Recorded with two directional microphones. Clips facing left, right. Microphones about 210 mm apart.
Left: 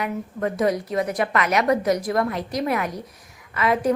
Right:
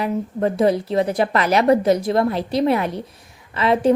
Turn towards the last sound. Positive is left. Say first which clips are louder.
# right 4 dB
turn(degrees=-30)  # may be behind; listen again after turning